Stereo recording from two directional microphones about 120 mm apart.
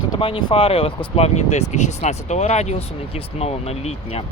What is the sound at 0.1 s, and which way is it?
Speech, 45° left (ahead or behind).